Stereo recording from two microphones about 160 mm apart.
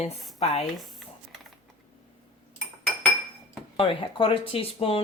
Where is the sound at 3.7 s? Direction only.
30° left (ahead or behind).